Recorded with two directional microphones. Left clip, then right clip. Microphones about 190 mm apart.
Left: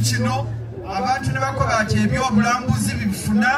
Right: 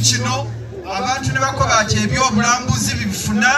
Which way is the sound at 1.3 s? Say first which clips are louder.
Right 5 dB; 20° right (ahead or behind).